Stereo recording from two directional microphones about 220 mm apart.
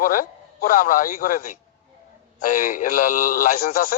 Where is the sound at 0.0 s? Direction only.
40° left (ahead or behind).